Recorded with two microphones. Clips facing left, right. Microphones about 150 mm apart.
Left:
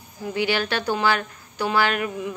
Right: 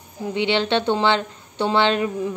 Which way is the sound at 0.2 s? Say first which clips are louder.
Right 3 dB; 25° right (ahead or behind).